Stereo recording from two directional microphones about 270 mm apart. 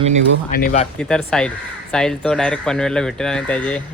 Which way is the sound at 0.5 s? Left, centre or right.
Left.